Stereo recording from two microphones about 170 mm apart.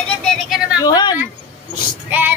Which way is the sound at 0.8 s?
25° left (ahead or behind).